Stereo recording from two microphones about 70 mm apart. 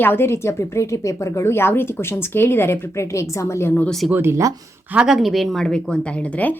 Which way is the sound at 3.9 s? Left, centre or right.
Centre.